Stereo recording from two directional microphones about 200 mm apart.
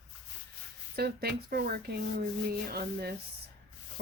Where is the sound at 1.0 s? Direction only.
50° right (ahead or behind).